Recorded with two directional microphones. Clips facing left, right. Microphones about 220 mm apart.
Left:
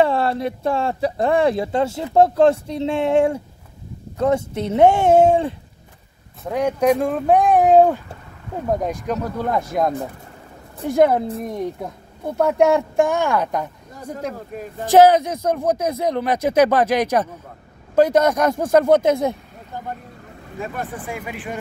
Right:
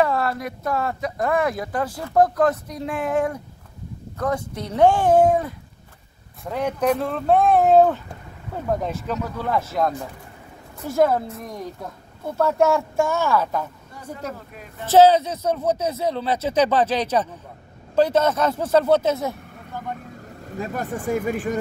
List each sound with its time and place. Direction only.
0.0 s speech: 30° left (ahead or behind)
6.5 s speech: 10° left (ahead or behind)
14.5 s speech: 45° left (ahead or behind)
14.9 s speech: 15° left (ahead or behind)
20.5 s speech: 40° right (ahead or behind)